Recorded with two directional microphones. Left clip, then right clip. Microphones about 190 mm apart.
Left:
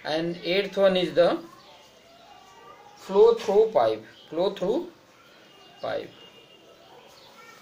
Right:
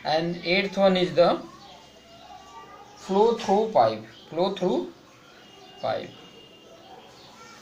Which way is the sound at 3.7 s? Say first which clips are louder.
Right 2 dB; 55° left (ahead or behind).